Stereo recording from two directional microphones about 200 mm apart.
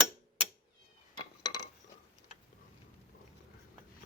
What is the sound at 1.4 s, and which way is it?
Cutlery, 20° left (ahead or behind).